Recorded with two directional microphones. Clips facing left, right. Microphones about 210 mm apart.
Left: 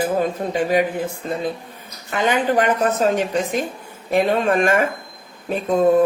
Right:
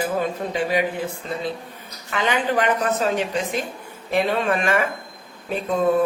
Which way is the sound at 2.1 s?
45° left (ahead or behind).